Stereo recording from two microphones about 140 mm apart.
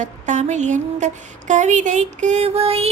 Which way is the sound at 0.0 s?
60° right (ahead or behind).